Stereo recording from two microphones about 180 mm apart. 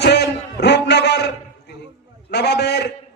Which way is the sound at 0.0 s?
70° left (ahead or behind).